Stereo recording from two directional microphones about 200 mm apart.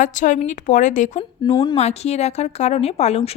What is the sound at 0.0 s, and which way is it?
Speech, 40° left (ahead or behind).